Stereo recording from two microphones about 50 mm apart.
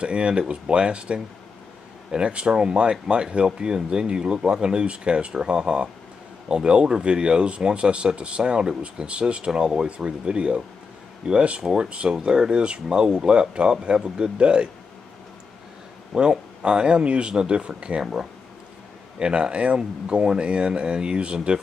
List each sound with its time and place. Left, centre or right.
0.0 s speech: centre
16.1 s speech: centre
19.1 s speech: centre